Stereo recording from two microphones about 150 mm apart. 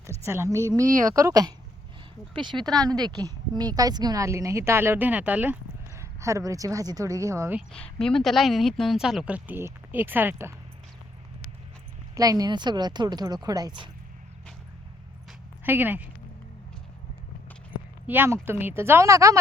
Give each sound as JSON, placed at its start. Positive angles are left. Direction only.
{"t": 0.3, "sound": "a woman's voice", "side_deg": -15}
{"t": 7.7, "sound": "speech", "side_deg": 5}
{"t": 12.1, "sound": "a woman's voice", "side_deg": -25}
{"t": 15.6, "sound": "a woman's voice", "side_deg": -15}
{"t": 18.0, "sound": "a woman's voice", "side_deg": -15}